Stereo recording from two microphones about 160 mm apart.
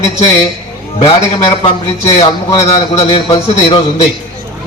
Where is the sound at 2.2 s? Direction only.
35° left (ahead or behind).